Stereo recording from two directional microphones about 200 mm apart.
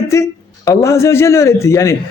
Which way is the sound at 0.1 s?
15° left (ahead or behind).